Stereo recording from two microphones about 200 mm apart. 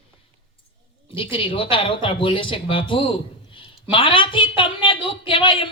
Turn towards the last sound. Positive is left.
turn(degrees=25)  # may be behind; listen again after turning